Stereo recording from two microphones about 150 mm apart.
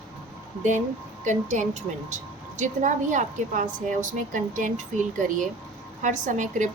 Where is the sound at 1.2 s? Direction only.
55° right (ahead or behind).